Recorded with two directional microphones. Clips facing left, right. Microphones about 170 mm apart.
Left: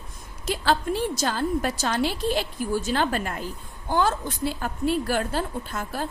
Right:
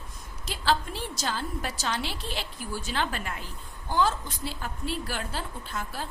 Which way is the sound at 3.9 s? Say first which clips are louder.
Left 3 dB; 55° left (ahead or behind).